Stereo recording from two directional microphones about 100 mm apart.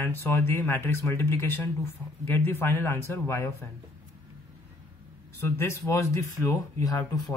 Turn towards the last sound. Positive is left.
turn(degrees=40)  # may be behind; listen again after turning